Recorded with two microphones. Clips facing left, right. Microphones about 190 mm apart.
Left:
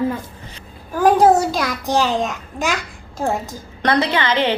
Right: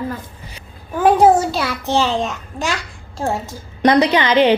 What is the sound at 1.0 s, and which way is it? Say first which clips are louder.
Speech: right 1 dB; 10° right (ahead or behind).